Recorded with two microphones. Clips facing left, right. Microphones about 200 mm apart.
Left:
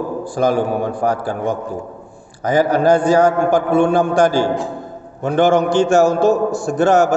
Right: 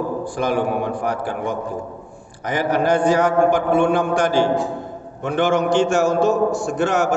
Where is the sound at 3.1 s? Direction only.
40° left (ahead or behind).